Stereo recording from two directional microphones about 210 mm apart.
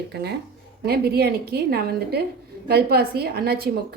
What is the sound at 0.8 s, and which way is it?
A woman's voice, 50° right (ahead or behind).